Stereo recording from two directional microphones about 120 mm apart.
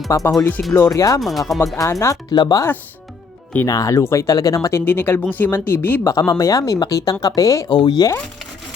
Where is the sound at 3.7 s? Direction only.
30° left (ahead or behind).